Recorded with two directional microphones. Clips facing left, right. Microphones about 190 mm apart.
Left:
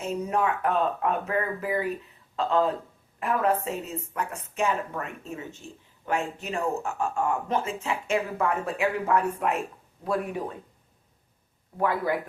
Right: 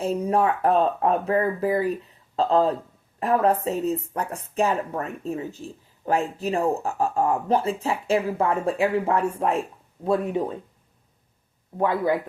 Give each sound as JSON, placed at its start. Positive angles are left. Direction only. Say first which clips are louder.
{"t": 0.0, "sound": "speech", "louder": "right 5 dB", "side_deg": -35}
{"t": 11.8, "sound": "speech", "louder": "right 4 dB", "side_deg": -20}